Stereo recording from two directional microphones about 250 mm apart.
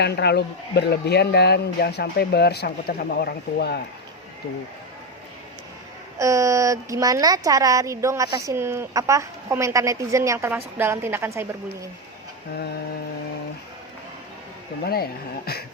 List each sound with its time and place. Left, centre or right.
0.0 s speech: left
6.1 s speech: centre
12.5 s speech: left
14.8 s speech: left